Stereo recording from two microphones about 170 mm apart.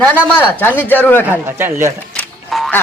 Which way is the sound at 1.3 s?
15° right (ahead or behind).